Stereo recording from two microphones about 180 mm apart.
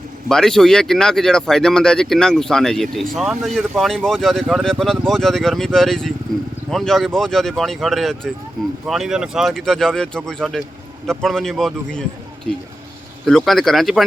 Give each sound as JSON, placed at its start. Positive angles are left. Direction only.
{"t": 0.3, "sound": "speech", "side_deg": 5}
{"t": 13.2, "sound": "speech", "side_deg": 0}